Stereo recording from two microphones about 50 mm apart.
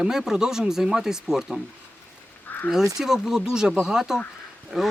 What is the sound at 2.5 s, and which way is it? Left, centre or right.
Crow, left.